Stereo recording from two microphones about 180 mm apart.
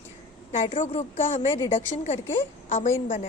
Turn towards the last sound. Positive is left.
turn(degrees=40)  # may be behind; listen again after turning